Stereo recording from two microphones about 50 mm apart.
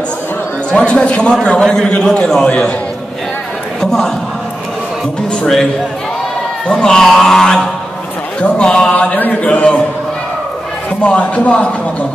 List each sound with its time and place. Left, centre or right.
0.7 s a man's voice: left
3.8 s a sound: centre
6.7 s a man's voice: centre
8.4 s a man's voice: centre
11.0 s speech: left